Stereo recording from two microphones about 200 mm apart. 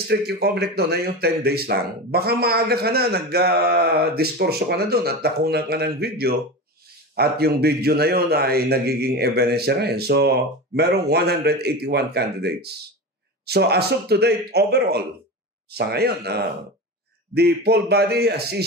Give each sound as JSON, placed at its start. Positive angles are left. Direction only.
{"t": 0.1, "sound": "speech", "side_deg": -55}